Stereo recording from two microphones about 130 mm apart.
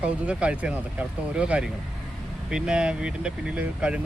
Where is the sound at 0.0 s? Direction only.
10° right (ahead or behind).